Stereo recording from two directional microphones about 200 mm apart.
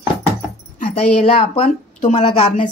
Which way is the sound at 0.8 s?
30° left (ahead or behind).